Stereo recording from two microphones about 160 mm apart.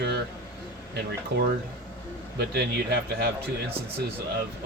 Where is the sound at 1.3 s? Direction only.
90° right.